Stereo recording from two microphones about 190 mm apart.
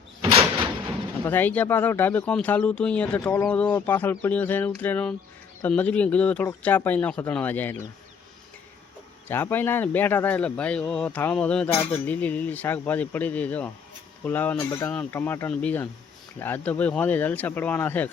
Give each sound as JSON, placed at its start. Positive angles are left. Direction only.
{"t": 0.2, "sound": "door", "side_deg": -30}
{"t": 1.2, "sound": "speech", "side_deg": 10}
{"t": 9.3, "sound": "speech", "side_deg": 10}